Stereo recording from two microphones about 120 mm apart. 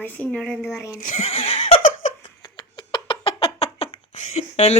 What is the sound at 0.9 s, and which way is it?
Speech, 85° left.